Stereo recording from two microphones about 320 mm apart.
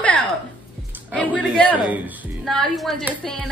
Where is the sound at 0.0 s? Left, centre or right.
Centre.